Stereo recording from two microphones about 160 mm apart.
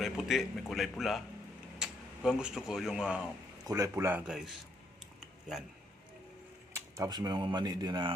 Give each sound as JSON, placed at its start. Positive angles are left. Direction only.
{"t": 0.0, "sound": "a man's voice", "side_deg": 0}
{"t": 3.7, "sound": "speech", "side_deg": -20}
{"t": 4.3, "sound": "a man's voice", "side_deg": 0}
{"t": 6.7, "sound": "speech", "side_deg": -20}